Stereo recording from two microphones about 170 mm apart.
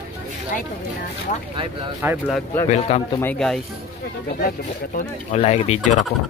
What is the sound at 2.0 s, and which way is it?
Speech, 15° right (ahead or behind).